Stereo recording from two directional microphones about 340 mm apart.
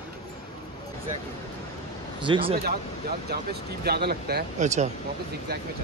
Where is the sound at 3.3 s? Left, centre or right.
Right.